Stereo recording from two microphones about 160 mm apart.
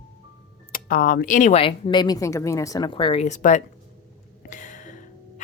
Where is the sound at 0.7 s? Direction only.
60° left (ahead or behind).